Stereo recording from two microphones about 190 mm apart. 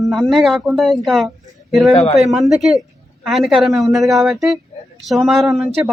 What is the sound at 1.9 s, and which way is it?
Speech, 35° left (ahead or behind).